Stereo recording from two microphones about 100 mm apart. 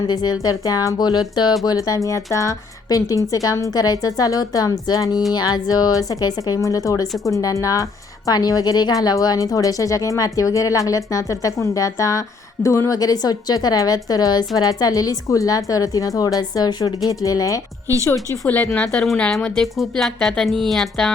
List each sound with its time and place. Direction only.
0.1 s a woman's voice: 45° left (ahead or behind)
18.4 s a woman's voice: 15° left (ahead or behind)